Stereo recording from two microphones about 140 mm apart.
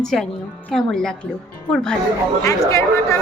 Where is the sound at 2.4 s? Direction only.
20° left (ahead or behind).